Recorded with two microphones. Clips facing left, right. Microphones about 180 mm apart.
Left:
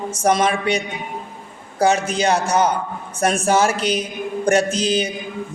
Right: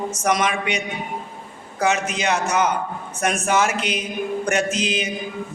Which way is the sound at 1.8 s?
35° left (ahead or behind).